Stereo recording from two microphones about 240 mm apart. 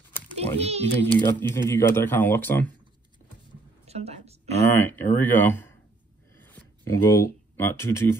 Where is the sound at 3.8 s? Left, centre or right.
Right.